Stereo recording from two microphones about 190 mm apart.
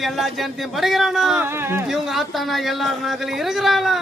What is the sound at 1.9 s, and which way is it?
A man's voice, centre (ahead or behind).